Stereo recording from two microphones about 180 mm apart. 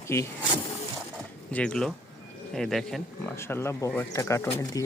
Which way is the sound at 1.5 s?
5° left (ahead or behind).